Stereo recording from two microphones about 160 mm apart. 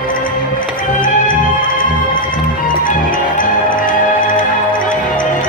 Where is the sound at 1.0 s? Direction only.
60° left (ahead or behind).